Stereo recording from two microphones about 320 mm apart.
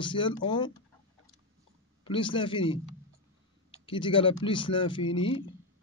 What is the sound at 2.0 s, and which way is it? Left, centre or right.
Speech, centre.